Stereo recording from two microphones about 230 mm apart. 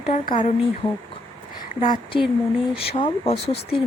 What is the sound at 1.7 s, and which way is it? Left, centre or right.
Speech, left.